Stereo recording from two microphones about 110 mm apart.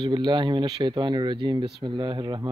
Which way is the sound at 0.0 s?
45° right (ahead or behind).